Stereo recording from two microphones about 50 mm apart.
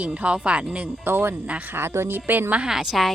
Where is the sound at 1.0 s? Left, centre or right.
Right.